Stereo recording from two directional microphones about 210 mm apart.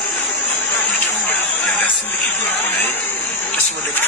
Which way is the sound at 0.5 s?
10° left (ahead or behind).